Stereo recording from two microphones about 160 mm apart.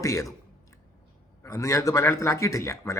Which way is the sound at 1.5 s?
20° left (ahead or behind).